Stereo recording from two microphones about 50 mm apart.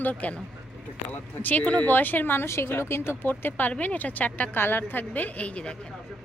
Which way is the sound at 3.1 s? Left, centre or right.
Left.